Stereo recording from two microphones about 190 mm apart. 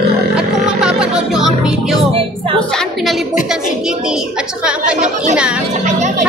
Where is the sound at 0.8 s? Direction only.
5° right (ahead or behind).